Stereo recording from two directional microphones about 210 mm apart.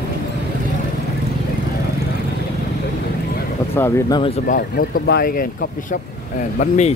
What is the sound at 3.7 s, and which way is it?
Speech, 10° left (ahead or behind).